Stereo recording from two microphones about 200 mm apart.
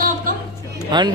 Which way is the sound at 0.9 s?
20° right (ahead or behind).